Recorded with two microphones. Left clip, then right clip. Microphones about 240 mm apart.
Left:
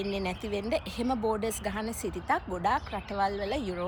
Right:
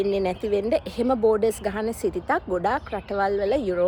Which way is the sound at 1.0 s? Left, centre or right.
Right.